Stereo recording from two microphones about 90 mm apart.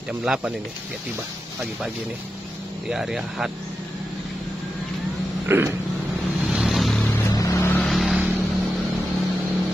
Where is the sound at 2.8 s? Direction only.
5° right (ahead or behind).